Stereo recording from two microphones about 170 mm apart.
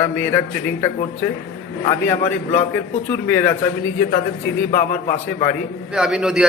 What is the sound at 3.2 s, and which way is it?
Speech, 10° left (ahead or behind).